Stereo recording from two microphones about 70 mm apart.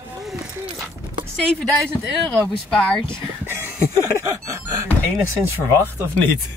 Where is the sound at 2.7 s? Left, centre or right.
Centre.